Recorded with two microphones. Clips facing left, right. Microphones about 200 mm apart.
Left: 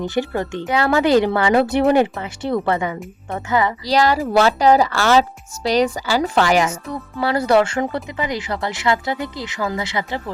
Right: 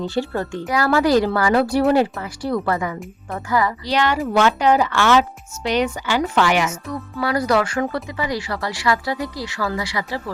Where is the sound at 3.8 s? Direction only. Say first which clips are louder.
Left 3 dB; 35° left (ahead or behind).